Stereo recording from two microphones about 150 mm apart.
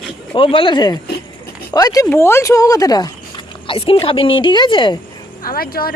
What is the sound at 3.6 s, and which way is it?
A woman's voice, 35° left (ahead or behind).